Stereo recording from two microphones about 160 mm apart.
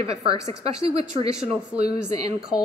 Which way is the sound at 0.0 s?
35° right (ahead or behind).